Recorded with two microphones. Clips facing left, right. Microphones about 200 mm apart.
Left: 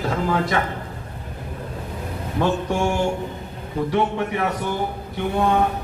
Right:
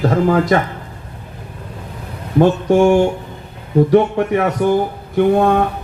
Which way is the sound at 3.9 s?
50° right (ahead or behind).